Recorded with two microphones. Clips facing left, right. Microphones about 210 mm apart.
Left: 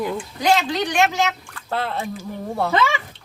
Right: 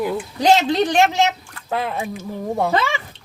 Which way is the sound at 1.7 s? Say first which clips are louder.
Right 2 dB; 15° right (ahead or behind).